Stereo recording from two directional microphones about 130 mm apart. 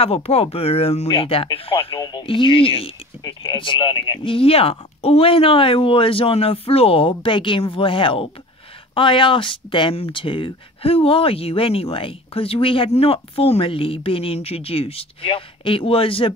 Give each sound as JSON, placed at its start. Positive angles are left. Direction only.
{"t": 0.0, "sound": "speech", "side_deg": 50}
{"t": 2.0, "sound": "speech", "side_deg": 30}
{"t": 2.2, "sound": "speech", "side_deg": 40}